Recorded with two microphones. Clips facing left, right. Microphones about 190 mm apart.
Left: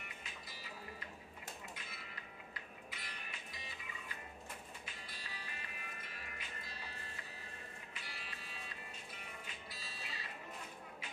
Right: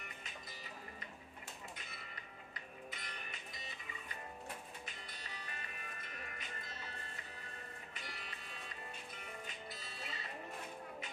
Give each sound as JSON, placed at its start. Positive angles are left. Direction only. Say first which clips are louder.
{"t": 2.5, "sound": "music", "louder": "right 2 dB", "side_deg": -45}
{"t": 9.7, "sound": "music", "louder": "right 3 dB", "side_deg": -50}